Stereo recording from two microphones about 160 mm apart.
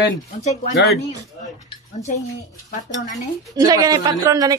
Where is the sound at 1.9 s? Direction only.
45° left (ahead or behind).